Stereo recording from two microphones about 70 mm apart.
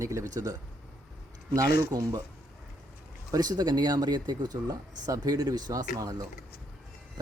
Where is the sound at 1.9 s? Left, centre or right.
Right.